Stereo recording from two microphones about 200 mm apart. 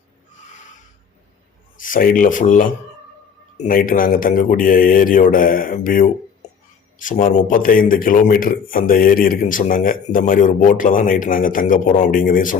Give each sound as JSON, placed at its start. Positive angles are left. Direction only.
{"t": 1.8, "sound": "a man's voice", "side_deg": 45}